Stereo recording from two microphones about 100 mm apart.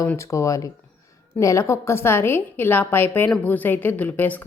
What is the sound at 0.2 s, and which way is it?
A woman's voice, 30° left (ahead or behind).